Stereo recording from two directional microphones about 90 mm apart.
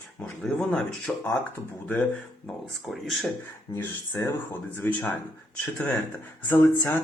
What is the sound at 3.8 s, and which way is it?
Speech, 25° left (ahead or behind).